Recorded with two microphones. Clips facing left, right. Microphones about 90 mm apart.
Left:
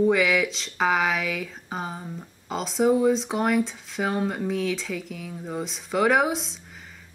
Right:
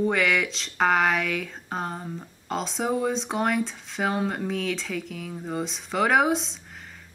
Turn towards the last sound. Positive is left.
turn(degrees=0)  # may be behind; listen again after turning